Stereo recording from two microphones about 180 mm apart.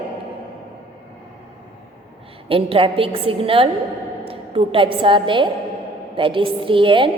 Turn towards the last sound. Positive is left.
turn(degrees=-30)  # may be behind; listen again after turning